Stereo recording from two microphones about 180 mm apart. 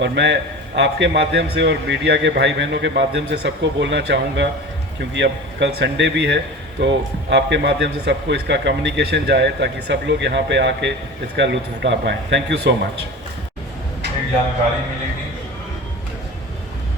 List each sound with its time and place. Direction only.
0.0 s a man's voice: 75° right (ahead or behind)